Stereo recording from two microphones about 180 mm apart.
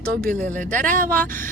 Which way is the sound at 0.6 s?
45° right (ahead or behind).